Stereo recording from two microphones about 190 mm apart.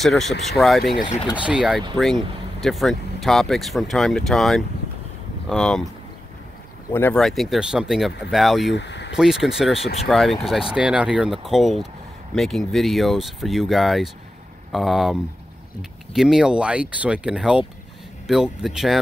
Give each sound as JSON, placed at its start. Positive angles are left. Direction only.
{"t": 0.0, "sound": "speech", "side_deg": 0}
{"t": 0.9, "sound": "speech", "side_deg": 45}
{"t": 1.3, "sound": "speech", "side_deg": -5}
{"t": 6.9, "sound": "speech", "side_deg": 10}
{"t": 8.7, "sound": "speech", "side_deg": 65}
{"t": 9.1, "sound": "speech", "side_deg": 0}
{"t": 16.2, "sound": "speech", "side_deg": 0}